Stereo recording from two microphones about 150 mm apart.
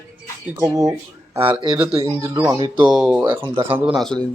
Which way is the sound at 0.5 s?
20° right (ahead or behind).